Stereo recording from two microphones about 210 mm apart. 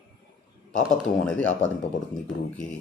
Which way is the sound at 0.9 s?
5° left (ahead or behind).